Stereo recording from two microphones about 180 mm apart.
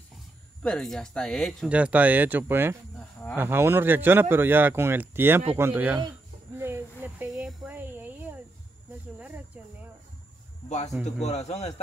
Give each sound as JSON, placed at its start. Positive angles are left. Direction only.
{"t": 0.6, "sound": "speech", "side_deg": 5}
{"t": 6.6, "sound": "a sound", "side_deg": -10}
{"t": 11.1, "sound": "a man's voice", "side_deg": 40}